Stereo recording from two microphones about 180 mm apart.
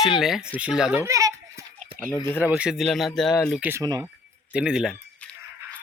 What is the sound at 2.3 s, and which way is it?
Speech, 5° right (ahead or behind).